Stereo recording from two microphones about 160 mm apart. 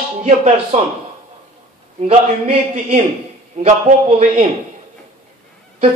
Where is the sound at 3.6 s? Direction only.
45° right (ahead or behind).